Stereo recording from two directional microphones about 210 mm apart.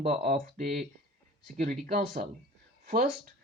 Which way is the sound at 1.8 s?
40° right (ahead or behind).